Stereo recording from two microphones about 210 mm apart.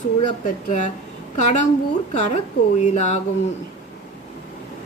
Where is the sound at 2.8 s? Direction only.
35° left (ahead or behind).